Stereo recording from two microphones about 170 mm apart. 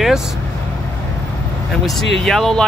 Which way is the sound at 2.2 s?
Centre (ahead or behind).